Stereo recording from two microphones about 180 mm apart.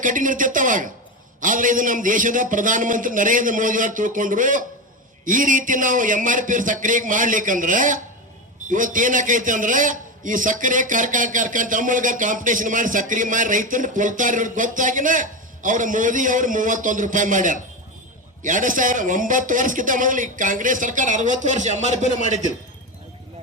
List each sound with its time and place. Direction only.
0.0 s a man's voice: 45° right (ahead or behind)